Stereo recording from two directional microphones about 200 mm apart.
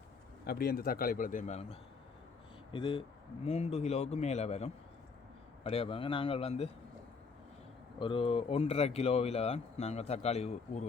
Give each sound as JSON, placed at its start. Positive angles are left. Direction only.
{"t": 0.4, "sound": "a man's voice", "side_deg": 50}
{"t": 7.9, "sound": "speech", "side_deg": 25}